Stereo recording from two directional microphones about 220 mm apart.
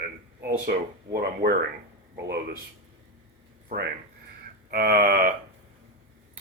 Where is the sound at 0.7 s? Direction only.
45° right (ahead or behind).